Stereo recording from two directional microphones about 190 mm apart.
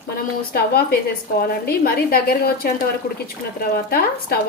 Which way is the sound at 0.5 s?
55° left (ahead or behind).